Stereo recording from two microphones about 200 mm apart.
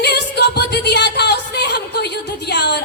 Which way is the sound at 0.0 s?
55° left (ahead or behind).